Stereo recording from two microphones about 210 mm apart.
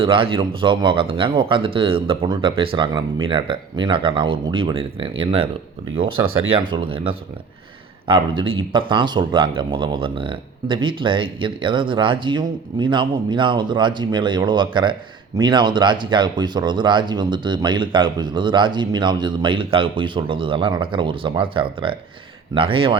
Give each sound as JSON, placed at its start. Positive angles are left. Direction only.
{"t": 0.0, "sound": "speech", "side_deg": -25}